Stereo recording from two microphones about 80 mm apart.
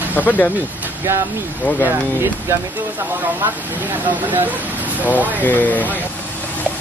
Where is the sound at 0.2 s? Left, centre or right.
Left.